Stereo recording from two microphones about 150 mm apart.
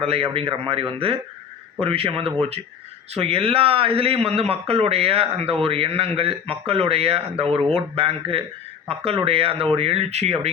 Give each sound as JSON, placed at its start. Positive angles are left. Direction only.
{"t": 0.0, "sound": "speech", "side_deg": -40}